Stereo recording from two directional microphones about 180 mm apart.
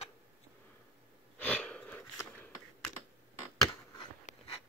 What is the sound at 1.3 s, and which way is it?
Wheeze, 10° left (ahead or behind).